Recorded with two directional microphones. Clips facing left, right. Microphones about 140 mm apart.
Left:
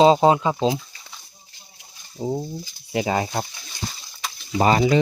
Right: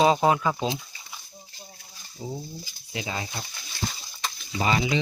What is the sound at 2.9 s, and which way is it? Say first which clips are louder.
Speech: left 10 dB; 60° left (ahead or behind).